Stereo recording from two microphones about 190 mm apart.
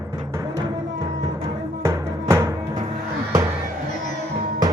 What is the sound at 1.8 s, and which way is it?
Music, 15° right (ahead or behind).